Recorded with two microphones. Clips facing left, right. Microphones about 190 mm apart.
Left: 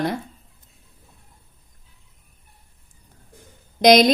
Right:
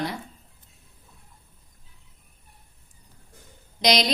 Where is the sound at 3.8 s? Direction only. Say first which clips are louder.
Left 10 dB; 50° left (ahead or behind).